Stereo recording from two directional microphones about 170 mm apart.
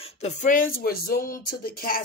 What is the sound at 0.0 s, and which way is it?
Speech, 40° left (ahead or behind).